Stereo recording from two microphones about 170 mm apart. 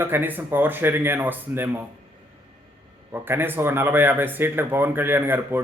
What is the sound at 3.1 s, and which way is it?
Speech, 10° right (ahead or behind).